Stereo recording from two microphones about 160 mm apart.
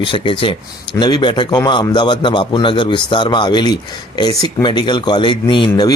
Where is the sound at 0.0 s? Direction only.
35° left (ahead or behind).